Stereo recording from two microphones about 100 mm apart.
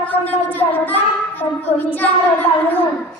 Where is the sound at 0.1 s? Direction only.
15° left (ahead or behind).